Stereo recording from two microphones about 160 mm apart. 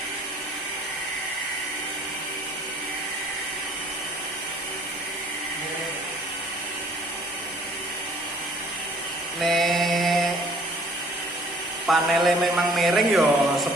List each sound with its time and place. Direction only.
9.4 s mantra: centre (ahead or behind)
11.9 s a man's voice: centre (ahead or behind)